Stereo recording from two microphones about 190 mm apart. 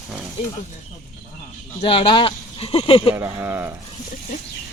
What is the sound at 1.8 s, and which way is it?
Speech, 25° left (ahead or behind).